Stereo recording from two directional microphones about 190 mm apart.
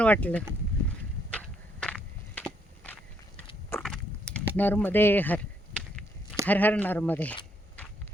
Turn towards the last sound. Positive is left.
turn(degrees=10)  # may be behind; listen again after turning